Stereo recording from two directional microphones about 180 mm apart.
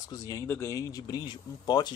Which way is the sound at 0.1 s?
20° left (ahead or behind).